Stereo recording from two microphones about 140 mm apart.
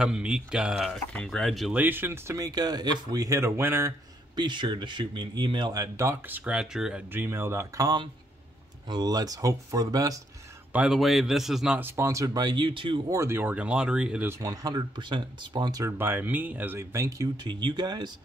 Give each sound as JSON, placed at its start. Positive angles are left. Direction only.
{"t": 0.0, "sound": "speech", "side_deg": -5}
{"t": 1.8, "sound": "speech", "side_deg": -15}
{"t": 4.4, "sound": "speech", "side_deg": -35}
{"t": 7.1, "sound": "speech", "side_deg": -15}
{"t": 10.7, "sound": "speech", "side_deg": -5}
{"t": 11.8, "sound": "speech", "side_deg": -20}
{"t": 13.1, "sound": "speech", "side_deg": -20}
{"t": 14.4, "sound": "speech", "side_deg": -25}
{"t": 16.0, "sound": "speech", "side_deg": -15}